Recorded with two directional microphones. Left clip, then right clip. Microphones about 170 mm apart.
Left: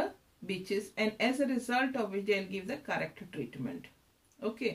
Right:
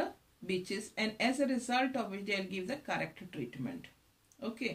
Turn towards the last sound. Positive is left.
turn(degrees=20)  # may be behind; listen again after turning